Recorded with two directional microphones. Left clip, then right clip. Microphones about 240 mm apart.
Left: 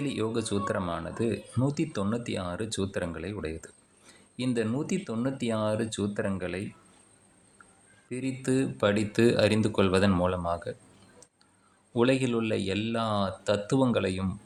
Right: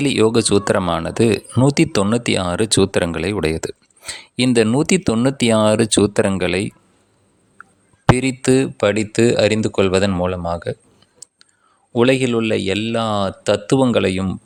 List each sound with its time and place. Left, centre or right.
0.0 s speech: right
8.1 s speech: right
11.9 s speech: right